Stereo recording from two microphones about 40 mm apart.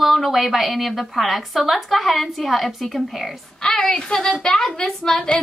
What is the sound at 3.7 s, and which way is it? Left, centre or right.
A woman's voice, left.